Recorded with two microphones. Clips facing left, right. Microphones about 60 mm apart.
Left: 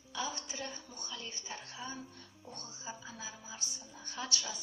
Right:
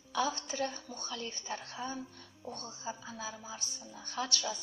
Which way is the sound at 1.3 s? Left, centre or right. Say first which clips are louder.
Right 5 dB; right.